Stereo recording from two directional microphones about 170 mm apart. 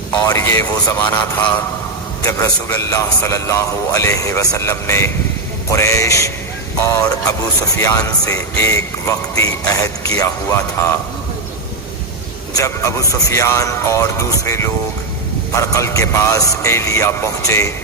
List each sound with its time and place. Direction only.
0.3 s speech: 15° left (ahead or behind)
7.8 s speech: 20° left (ahead or behind)
12.5 s speech: 20° left (ahead or behind)